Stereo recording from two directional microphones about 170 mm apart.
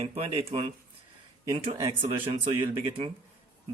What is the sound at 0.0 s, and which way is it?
Speech, 35° right (ahead or behind).